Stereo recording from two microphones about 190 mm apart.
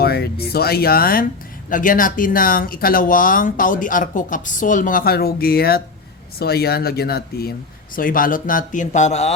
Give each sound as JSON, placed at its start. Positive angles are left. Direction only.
{"t": 0.0, "sound": "speech", "side_deg": 55}